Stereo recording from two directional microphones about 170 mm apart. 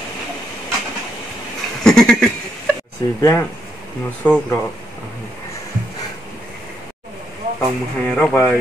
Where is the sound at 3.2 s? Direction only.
15° left (ahead or behind).